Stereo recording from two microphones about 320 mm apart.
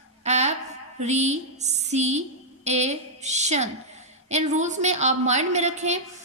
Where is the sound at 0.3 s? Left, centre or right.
Right.